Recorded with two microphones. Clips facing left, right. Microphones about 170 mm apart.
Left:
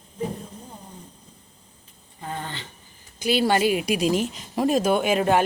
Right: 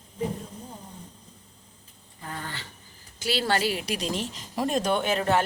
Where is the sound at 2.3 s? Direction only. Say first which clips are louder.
Left 4 dB; 20° left (ahead or behind).